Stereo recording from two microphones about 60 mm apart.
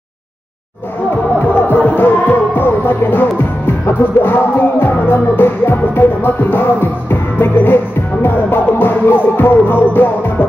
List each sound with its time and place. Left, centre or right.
1.7 s music: left